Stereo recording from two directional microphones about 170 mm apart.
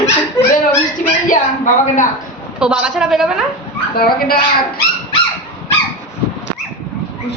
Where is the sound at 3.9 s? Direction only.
60° left (ahead or behind).